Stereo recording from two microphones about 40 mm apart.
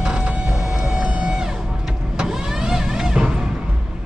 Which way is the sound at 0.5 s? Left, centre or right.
Centre.